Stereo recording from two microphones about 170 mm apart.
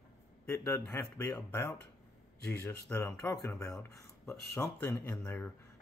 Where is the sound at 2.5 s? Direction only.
15° left (ahead or behind).